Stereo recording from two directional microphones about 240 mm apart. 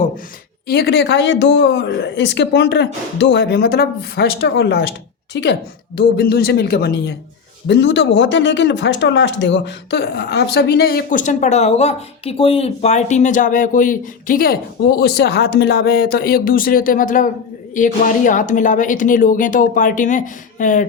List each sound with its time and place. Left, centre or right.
0.7 s speech: left